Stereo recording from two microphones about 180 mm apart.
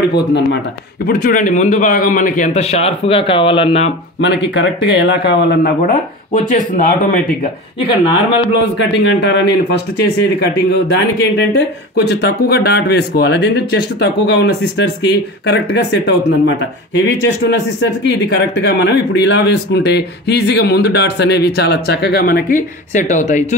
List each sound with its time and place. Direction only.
1.0 s a man's voice: 50° left (ahead or behind); by 3.9 s 30° left (ahead or behind)
4.2 s a man's voice: 75° left (ahead or behind)
5.8 s a man's voice: 45° left (ahead or behind)
8.7 s a man's voice: 90° left; by 16.5 s 75° left (ahead or behind)
18.0 s a man's voice: 70° left (ahead or behind); by 23.4 s 40° left (ahead or behind)